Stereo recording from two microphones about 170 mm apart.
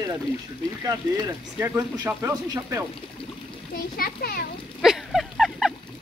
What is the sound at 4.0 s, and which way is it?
Speech, 60° left (ahead or behind).